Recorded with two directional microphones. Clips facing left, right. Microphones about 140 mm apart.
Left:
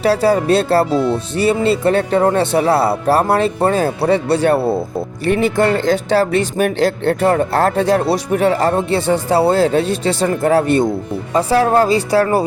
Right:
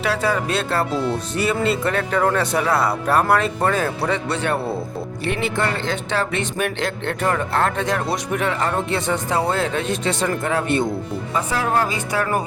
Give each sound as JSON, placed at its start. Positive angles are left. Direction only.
{"t": 0.0, "sound": "speech", "side_deg": 35}